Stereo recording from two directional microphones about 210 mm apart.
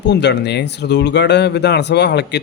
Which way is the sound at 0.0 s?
55° left (ahead or behind).